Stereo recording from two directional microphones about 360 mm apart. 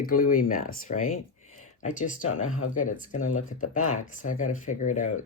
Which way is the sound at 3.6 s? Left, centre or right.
Left.